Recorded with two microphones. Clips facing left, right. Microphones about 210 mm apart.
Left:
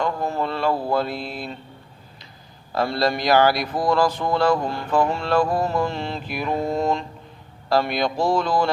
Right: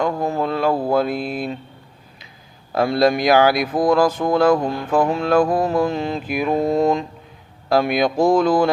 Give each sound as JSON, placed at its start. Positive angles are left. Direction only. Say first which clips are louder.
{"t": 0.0, "sound": "a sound", "louder": "right 3 dB", "side_deg": -50}
{"t": 0.9, "sound": "mantra", "louder": "right 5 dB", "side_deg": -50}
{"t": 2.7, "sound": "mantra", "louder": "right 5 dB", "side_deg": -50}